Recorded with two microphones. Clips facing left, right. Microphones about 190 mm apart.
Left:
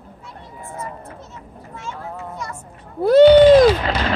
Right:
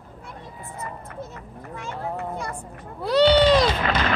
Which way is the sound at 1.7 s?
60° right (ahead or behind).